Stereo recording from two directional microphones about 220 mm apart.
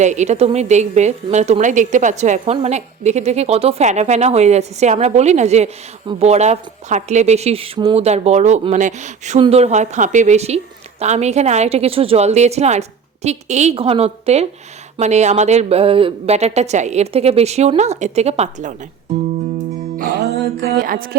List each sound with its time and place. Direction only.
0.0 s a woman's voice: 30° right (ahead or behind)
20.0 s music: 40° right (ahead or behind)